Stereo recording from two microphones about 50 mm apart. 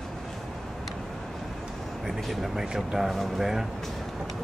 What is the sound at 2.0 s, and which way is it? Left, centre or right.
Speech, centre.